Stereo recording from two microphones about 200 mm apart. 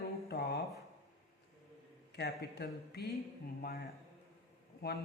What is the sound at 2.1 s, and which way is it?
Speech, 55° left (ahead or behind).